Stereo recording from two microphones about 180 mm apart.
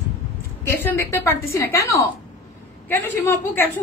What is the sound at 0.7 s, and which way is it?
A woman's voice, 15° left (ahead or behind).